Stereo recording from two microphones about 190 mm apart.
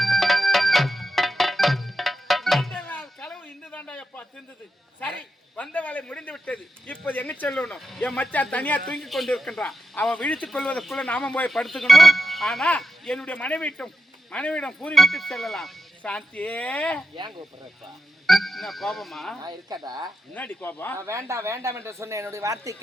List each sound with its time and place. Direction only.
0.0 s music: centre (ahead or behind)
5.5 s a man's voice: 5° left (ahead or behind)
18.3 s speech: centre (ahead or behind)
19.4 s speech: 20° right (ahead or behind)
20.3 s a man's voice: 10° left (ahead or behind)
21.0 s speech: 15° right (ahead or behind)